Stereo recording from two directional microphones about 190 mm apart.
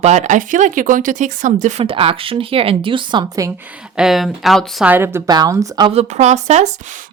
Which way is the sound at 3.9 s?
Centre (ahead or behind).